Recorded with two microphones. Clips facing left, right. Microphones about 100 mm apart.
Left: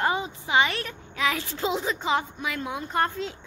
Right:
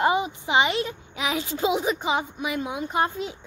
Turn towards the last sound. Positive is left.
turn(degrees=-15)  # may be behind; listen again after turning